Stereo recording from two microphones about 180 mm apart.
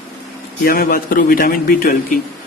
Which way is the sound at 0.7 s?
55° left (ahead or behind).